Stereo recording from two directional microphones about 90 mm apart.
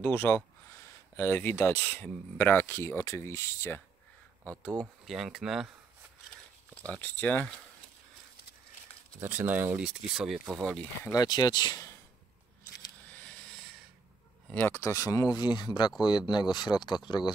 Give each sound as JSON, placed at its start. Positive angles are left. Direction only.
{"t": 0.0, "sound": "speech", "side_deg": 25}
{"t": 5.0, "sound": "speech", "side_deg": -5}
{"t": 6.7, "sound": "speech", "side_deg": 15}
{"t": 9.2, "sound": "speech", "side_deg": -25}
{"t": 9.8, "sound": "speech", "side_deg": -5}
{"t": 11.2, "sound": "speech", "side_deg": 50}
{"t": 14.5, "sound": "speech", "side_deg": 20}